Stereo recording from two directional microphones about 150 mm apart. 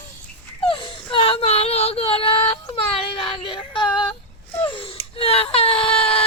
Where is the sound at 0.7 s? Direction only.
35° left (ahead or behind).